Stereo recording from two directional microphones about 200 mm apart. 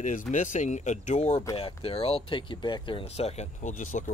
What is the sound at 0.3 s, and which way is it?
Speech, 40° left (ahead or behind).